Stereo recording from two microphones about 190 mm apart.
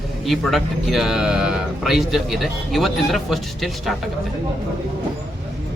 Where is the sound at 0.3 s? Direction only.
Centre (ahead or behind).